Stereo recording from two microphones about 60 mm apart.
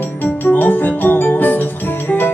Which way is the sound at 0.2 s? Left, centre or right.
Left.